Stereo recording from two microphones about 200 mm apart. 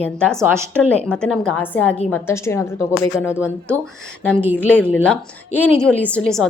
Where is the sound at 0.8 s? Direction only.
5° left (ahead or behind).